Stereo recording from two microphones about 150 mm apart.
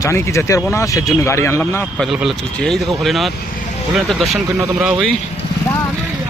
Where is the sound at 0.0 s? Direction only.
20° left (ahead or behind).